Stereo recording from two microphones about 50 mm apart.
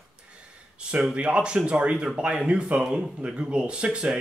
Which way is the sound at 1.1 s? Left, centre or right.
Right.